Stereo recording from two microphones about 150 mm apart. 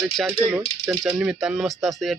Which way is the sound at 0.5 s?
10° right (ahead or behind).